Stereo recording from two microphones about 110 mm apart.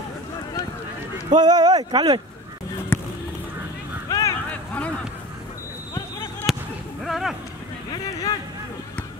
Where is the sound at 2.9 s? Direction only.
20° left (ahead or behind).